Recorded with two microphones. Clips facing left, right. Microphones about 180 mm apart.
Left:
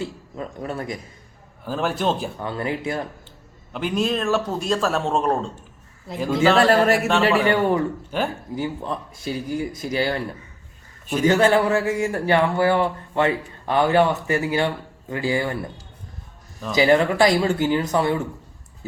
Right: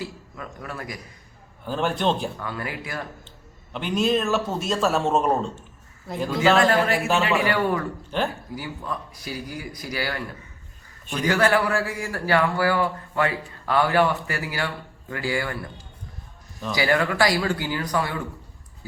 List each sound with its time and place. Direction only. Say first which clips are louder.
0.0 s a man's voice: left 5 dB; 25° left (ahead or behind)
1.6 s a man's voice: left 1 dB; centre (ahead or behind)
2.4 s a man's voice: left 6 dB; 25° left (ahead or behind)
3.7 s a man's voice: even; centre (ahead or behind)
6.6 s speech: left 4 dB; 40° left (ahead or behind)
7.4 s a man's voice: left 4 dB; 25° left (ahead or behind)
8.1 s speech: even; 5° left (ahead or behind)
8.5 s a man's voice: left 5 dB; 25° left (ahead or behind)
11.3 s a man's voice: left 4 dB; 25° left (ahead or behind)
16.7 s a man's voice: left 5 dB; 20° left (ahead or behind)